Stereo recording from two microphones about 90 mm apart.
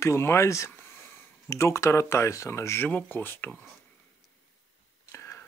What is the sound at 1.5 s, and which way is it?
Speech, 35° left (ahead or behind).